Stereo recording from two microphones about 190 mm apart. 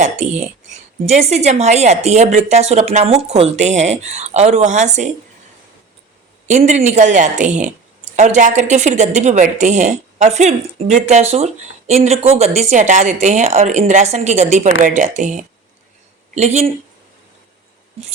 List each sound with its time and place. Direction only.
0.0 s a woman's voice: 40° right (ahead or behind)
6.5 s a woman's voice: 35° right (ahead or behind)